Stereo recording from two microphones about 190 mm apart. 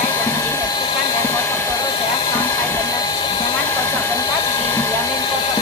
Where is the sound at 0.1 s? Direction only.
15° left (ahead or behind).